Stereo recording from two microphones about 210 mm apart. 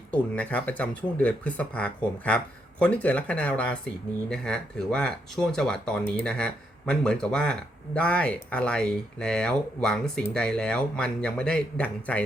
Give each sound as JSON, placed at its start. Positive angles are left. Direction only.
{"t": 0.1, "sound": "speech", "side_deg": 5}